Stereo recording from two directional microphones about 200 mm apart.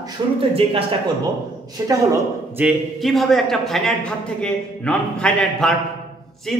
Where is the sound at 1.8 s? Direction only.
15° right (ahead or behind).